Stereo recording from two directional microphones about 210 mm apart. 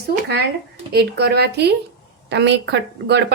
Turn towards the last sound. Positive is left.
turn(degrees=-55)  # may be behind; listen again after turning